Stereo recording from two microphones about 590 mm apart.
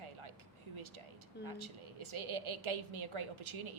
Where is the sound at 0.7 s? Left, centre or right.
Right.